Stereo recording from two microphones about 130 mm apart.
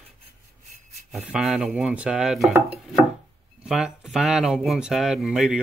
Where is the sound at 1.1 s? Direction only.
5° right (ahead or behind).